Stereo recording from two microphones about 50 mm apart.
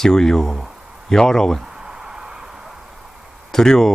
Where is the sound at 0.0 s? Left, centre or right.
Centre.